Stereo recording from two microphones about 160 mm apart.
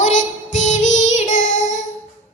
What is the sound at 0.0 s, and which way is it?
Child singing, 50° left (ahead or behind).